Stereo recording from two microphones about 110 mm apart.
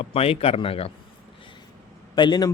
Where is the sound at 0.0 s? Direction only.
60° left (ahead or behind).